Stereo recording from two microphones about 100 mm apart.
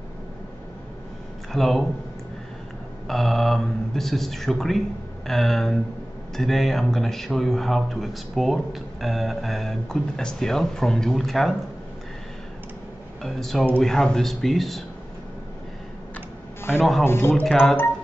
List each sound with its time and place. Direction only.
1.5 s a man's voice: 5° left (ahead or behind)
3.1 s a man's voice: 5° left (ahead or behind)
13.2 s a man's voice: 5° left (ahead or behind)
17.0 s speech: 25° left (ahead or behind)